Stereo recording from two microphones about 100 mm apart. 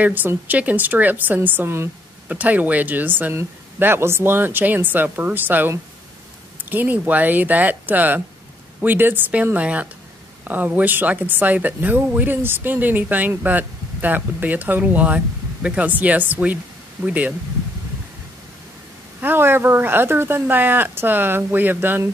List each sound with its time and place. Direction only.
0.0 s a woman's voice: 15° right (ahead or behind)
19.2 s a woman's voice: 20° right (ahead or behind)